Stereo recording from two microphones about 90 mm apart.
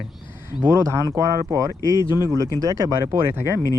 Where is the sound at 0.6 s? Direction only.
35° right (ahead or behind).